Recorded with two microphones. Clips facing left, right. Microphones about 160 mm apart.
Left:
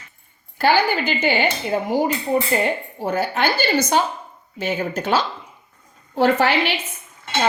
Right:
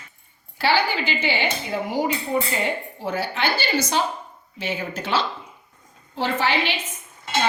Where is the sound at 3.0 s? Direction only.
45° left (ahead or behind).